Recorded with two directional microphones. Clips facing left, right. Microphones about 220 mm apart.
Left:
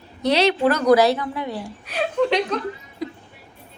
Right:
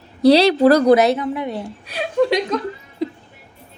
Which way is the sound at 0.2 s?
35° right (ahead or behind).